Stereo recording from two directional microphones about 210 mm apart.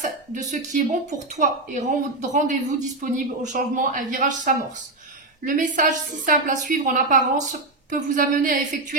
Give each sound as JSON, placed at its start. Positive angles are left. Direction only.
{"t": 0.0, "sound": "a woman's voice", "side_deg": -35}